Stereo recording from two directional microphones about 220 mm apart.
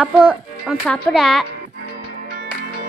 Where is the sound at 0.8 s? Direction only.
5° left (ahead or behind).